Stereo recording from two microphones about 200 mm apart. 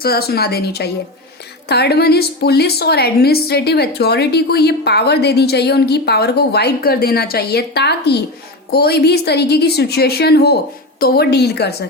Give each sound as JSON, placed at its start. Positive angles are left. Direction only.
{"t": 0.0, "sound": "a woman's voice", "side_deg": 50}